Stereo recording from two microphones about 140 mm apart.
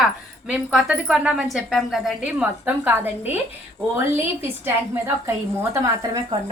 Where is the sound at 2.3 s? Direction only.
10° right (ahead or behind).